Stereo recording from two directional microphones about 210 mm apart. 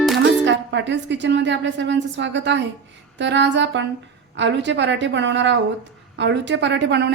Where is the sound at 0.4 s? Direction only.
60° right (ahead or behind).